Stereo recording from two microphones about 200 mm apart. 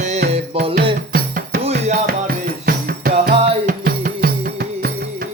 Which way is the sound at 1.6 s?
35° right (ahead or behind).